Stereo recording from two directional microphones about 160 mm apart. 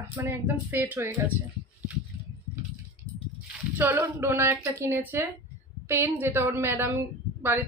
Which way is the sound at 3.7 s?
15° right (ahead or behind).